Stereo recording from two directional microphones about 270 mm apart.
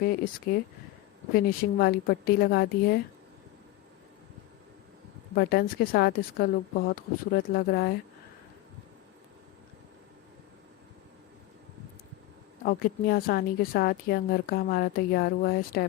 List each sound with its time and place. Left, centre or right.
0.0 s a woman's voice: left
5.3 s a woman's voice: left
12.6 s a woman's voice: left